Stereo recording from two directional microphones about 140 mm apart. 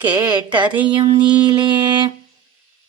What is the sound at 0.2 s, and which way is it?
Music, 30° right (ahead or behind).